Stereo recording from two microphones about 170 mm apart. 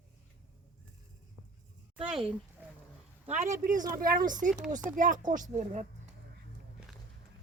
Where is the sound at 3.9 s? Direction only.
60° right (ahead or behind).